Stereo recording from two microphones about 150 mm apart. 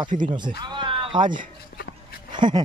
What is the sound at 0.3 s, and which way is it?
Speech, 30° right (ahead or behind).